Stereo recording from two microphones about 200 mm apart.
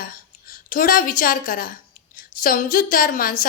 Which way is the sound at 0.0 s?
45° left (ahead or behind).